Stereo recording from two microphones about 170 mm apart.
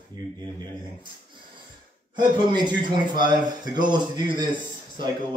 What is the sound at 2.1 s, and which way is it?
Speech, 25° right (ahead or behind).